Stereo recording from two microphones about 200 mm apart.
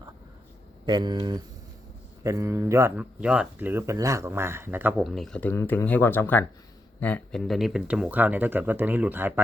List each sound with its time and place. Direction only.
0.9 s speech: 20° right (ahead or behind)